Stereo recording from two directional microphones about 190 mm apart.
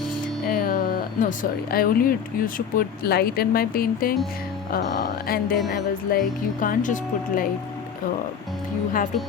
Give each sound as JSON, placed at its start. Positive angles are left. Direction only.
{"t": 0.4, "sound": "speech", "side_deg": 45}